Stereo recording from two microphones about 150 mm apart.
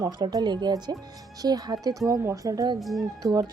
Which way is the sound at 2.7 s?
Centre (ahead or behind).